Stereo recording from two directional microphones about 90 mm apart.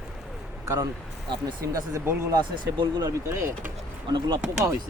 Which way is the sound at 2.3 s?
60° right (ahead or behind).